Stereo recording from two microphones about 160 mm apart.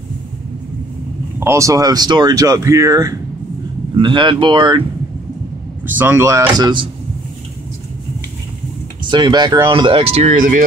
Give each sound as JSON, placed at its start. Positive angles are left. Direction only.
{"t": 1.4, "sound": "speech", "side_deg": -20}
{"t": 3.9, "sound": "speech", "side_deg": -30}
{"t": 5.9, "sound": "speech", "side_deg": -15}
{"t": 9.1, "sound": "speech", "side_deg": -30}
{"t": 10.3, "sound": "speech", "side_deg": -55}